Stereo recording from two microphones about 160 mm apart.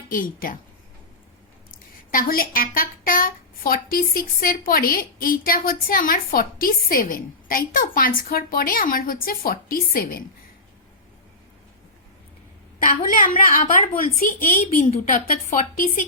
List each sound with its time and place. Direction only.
0.1 s speech: 60° left (ahead or behind)
1.7 s speech: 60° left (ahead or behind)
12.8 s a woman's voice: 60° left (ahead or behind)